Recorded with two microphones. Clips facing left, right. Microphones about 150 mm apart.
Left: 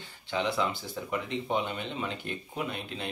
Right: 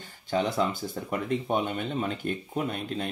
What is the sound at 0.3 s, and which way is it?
Speech, 45° right (ahead or behind).